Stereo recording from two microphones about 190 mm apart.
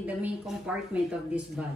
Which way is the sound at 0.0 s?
5° right (ahead or behind).